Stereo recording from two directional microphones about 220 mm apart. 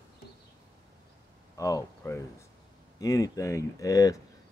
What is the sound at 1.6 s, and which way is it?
Speech, 15° left (ahead or behind).